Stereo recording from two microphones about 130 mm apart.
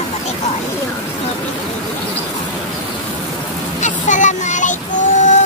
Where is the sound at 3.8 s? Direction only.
70° left (ahead or behind).